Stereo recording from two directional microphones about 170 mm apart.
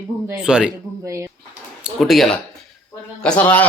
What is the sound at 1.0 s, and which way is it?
Speech, 15° right (ahead or behind).